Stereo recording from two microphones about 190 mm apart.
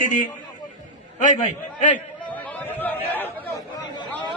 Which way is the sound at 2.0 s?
10° left (ahead or behind).